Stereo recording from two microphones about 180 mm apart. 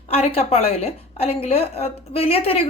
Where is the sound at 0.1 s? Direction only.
35° left (ahead or behind).